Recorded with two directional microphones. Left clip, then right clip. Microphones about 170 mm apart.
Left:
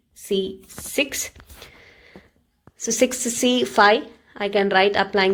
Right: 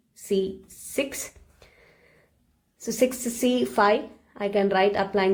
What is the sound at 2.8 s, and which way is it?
A woman's voice, 35° left (ahead or behind).